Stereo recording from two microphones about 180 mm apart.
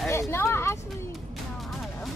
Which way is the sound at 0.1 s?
15° left (ahead or behind).